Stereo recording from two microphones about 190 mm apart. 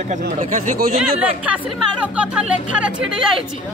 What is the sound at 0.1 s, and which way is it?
Speech, 40° right (ahead or behind).